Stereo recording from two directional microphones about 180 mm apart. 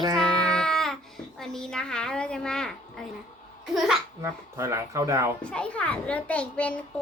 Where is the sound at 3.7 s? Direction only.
Centre (ahead or behind).